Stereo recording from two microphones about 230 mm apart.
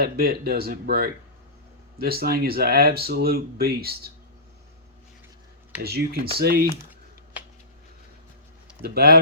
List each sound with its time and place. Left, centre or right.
0.0 s speech: right
5.8 s speech: right
8.8 s speech: right